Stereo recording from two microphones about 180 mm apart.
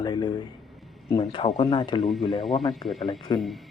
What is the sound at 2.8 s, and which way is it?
Speech, 20° left (ahead or behind).